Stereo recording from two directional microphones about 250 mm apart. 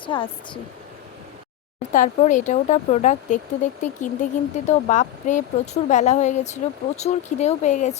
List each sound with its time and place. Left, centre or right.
0.0 s speech: centre
1.9 s speech: left